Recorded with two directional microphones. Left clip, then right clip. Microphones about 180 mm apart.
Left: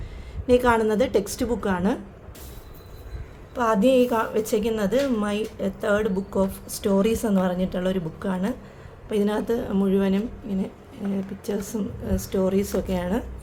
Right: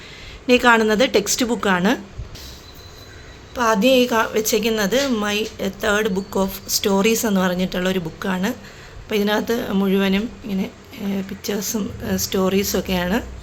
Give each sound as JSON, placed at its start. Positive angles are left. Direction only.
{"t": 0.4, "sound": "a woman's voice", "side_deg": -5}
{"t": 3.5, "sound": "a woman's voice", "side_deg": 0}